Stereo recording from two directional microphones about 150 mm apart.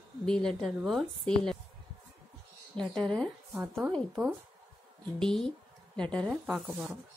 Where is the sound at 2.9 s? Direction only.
5° left (ahead or behind).